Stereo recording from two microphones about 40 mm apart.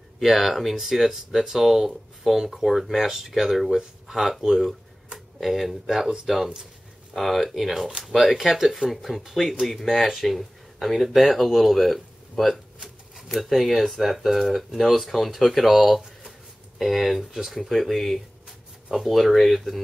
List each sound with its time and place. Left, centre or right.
0.2 s speech: centre
6.0 s speech: centre